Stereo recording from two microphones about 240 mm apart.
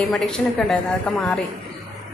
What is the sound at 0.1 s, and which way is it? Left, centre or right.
Speech, centre.